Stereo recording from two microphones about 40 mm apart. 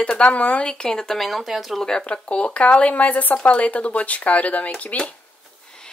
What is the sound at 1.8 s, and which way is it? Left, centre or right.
Speech, centre.